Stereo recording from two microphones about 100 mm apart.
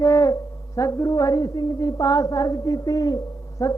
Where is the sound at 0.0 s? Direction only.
35° left (ahead or behind).